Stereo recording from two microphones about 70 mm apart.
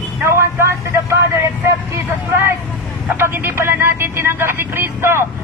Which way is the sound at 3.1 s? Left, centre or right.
Right.